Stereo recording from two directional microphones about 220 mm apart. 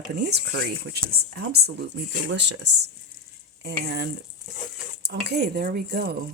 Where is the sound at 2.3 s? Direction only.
50° right (ahead or behind).